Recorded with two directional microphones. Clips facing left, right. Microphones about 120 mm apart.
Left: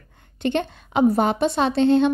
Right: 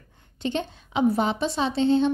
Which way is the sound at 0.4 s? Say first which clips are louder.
Left 5 dB; 60° left (ahead or behind).